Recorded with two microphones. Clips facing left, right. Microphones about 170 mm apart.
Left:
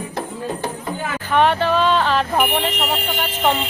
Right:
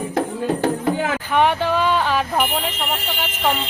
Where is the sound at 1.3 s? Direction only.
15° right (ahead or behind).